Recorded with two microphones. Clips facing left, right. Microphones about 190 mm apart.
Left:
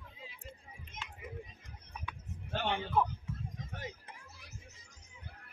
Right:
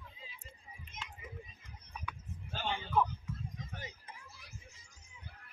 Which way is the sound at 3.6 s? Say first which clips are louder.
Left 3 dB; 55° left (ahead or behind).